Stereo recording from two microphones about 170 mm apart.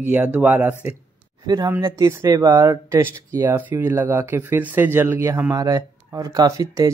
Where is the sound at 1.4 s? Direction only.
25° right (ahead or behind).